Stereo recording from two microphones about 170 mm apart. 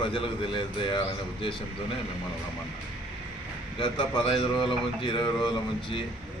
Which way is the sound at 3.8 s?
30° left (ahead or behind).